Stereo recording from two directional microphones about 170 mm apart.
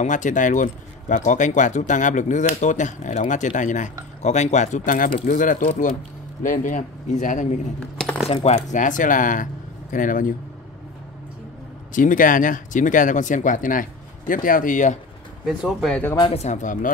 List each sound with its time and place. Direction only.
0.0 s speech: 50° left (ahead or behind)
7.8 s speech: 5° left (ahead or behind)
8.3 s speech: 40° left (ahead or behind)
11.9 s speech: 50° left (ahead or behind)
15.4 s speech: centre (ahead or behind)
16.2 s speech: 35° left (ahead or behind)